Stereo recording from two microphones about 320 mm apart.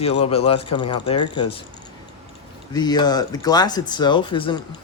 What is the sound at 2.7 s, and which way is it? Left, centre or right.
Speech, centre.